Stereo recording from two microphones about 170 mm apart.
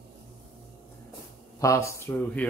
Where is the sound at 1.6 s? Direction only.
15° left (ahead or behind).